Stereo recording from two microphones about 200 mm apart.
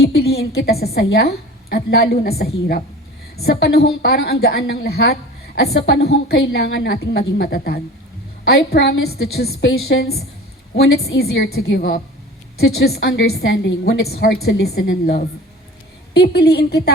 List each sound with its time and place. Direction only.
0.3 s a woman's voice: 50° left (ahead or behind); by 9.1 s 75° left (ahead or behind)
9.1 s a woman's voice: 50° left (ahead or behind)
9.5 s a woman's voice: 65° left (ahead or behind)